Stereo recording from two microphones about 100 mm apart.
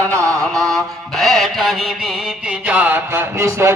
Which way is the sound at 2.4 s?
15° right (ahead or behind).